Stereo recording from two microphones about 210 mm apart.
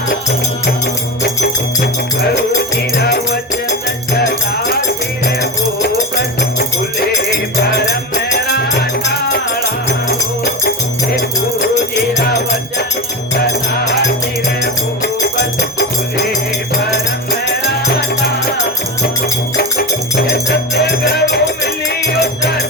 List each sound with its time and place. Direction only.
2.6 s music: 50° left (ahead or behind)
20.1 s music: 50° left (ahead or behind)